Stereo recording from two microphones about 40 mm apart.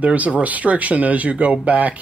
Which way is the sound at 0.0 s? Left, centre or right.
Right.